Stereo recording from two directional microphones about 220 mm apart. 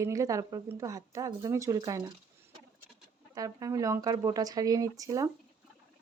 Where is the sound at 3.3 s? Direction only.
15° right (ahead or behind).